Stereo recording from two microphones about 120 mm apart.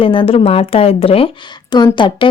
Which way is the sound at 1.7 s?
40° left (ahead or behind).